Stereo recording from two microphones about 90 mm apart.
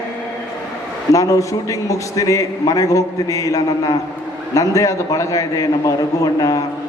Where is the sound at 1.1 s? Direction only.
40° left (ahead or behind).